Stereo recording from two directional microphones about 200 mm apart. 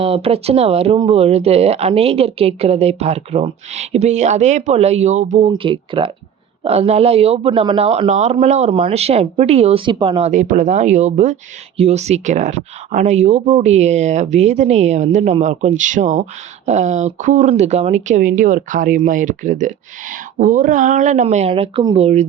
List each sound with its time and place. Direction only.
0.0 s speech: 30° right (ahead or behind)
5.5 s speech: 25° right (ahead or behind)